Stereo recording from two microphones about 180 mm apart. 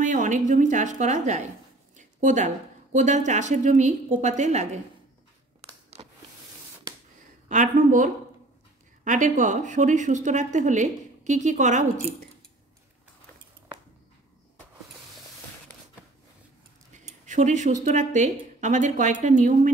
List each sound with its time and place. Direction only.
0.0 s a woman's voice: 45° right (ahead or behind)
7.4 s a woman's voice: 45° right (ahead or behind)
16.9 s a sound: 40° right (ahead or behind)
17.8 s a woman's voice: 40° right (ahead or behind)